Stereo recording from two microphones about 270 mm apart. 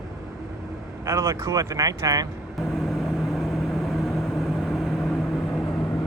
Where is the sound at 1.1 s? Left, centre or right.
Centre.